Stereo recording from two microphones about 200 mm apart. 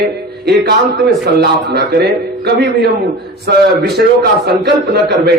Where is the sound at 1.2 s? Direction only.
55° right (ahead or behind).